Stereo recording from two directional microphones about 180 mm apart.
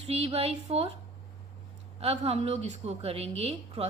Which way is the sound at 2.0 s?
35° right (ahead or behind).